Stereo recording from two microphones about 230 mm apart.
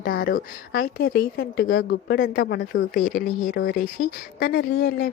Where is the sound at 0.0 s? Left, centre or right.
Left.